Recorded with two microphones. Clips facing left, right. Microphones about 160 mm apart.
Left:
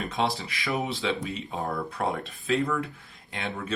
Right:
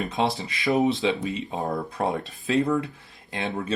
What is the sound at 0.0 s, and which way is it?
Speech, 20° right (ahead or behind).